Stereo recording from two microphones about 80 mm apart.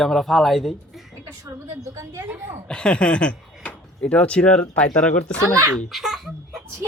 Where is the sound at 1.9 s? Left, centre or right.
Right.